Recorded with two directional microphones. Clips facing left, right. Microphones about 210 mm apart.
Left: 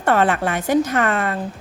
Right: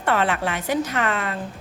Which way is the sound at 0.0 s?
45° left (ahead or behind).